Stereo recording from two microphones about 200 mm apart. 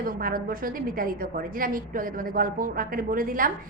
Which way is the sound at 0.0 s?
45° right (ahead or behind).